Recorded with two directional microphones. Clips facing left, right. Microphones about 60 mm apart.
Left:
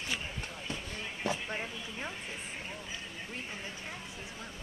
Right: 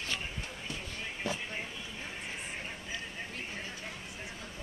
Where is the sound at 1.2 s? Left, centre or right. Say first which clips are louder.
Left 3 dB; centre.